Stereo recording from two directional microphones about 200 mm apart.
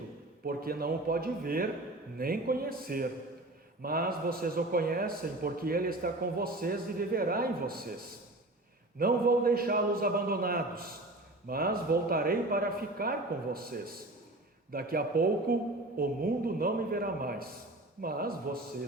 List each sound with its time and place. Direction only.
0.4 s a man's voice: 50° right (ahead or behind)
9.0 s a man's voice: 50° right (ahead or behind)